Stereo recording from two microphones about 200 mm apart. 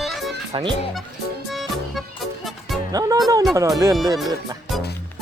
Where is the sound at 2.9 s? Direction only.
20° right (ahead or behind).